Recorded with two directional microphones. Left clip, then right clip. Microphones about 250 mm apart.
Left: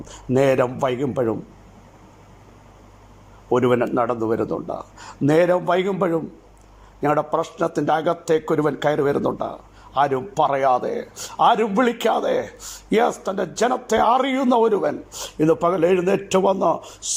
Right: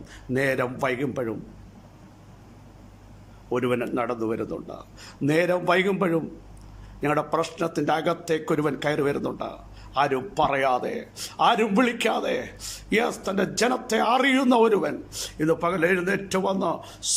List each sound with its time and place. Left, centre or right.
0.1 s a man's voice: centre
3.5 s a man's voice: centre